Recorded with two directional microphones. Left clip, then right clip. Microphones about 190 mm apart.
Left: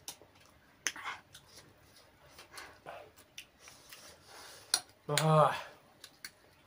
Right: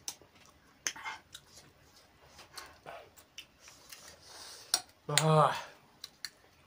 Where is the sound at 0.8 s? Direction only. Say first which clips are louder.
Even; 10° left (ahead or behind).